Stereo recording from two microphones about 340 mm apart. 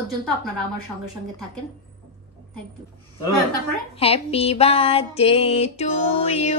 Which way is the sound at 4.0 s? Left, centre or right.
Centre.